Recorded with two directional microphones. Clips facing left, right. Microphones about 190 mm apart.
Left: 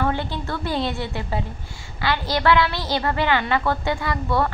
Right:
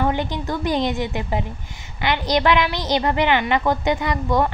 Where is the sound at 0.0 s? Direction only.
15° right (ahead or behind).